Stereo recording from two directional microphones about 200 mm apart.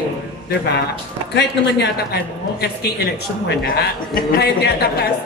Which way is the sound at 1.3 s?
55° left (ahead or behind).